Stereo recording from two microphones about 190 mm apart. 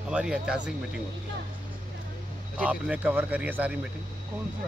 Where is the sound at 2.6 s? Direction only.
5° right (ahead or behind).